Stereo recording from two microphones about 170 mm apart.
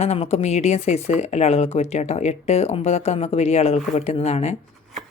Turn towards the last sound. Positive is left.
turn(degrees=40)  # may be behind; listen again after turning